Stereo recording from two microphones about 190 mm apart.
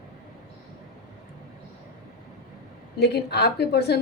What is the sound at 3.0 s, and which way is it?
Speech, 60° left (ahead or behind).